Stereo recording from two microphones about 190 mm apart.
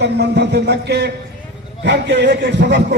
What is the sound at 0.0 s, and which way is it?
A man's voice, 60° right (ahead or behind).